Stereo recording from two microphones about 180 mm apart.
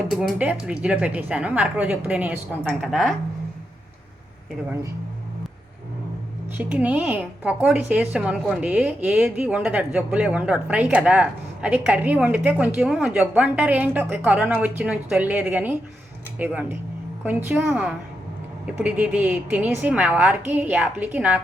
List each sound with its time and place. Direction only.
0.1 s a woman's voice: 5° right (ahead or behind)
6.6 s a woman's voice: 10° right (ahead or behind)